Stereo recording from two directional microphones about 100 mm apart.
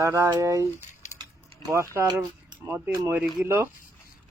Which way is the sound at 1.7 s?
30° right (ahead or behind).